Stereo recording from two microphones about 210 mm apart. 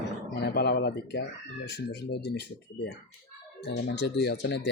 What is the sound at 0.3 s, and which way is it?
Speech, 50° left (ahead or behind).